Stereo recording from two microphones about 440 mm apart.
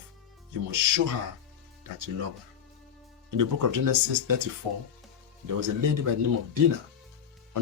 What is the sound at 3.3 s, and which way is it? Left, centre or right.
Speech, right.